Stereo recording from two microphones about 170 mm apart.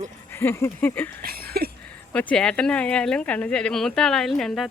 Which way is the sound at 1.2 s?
65° right (ahead or behind).